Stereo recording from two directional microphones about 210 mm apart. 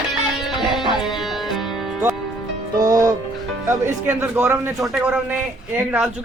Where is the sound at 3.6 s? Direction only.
10° right (ahead or behind).